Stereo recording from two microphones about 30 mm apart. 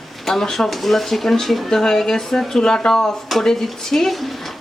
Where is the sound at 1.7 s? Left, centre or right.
Centre.